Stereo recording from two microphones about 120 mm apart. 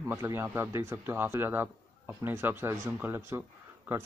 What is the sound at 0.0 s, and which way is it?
Speech, 20° right (ahead or behind).